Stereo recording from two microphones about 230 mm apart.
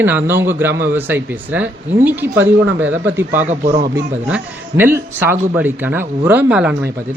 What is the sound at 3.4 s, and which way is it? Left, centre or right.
Speech, right.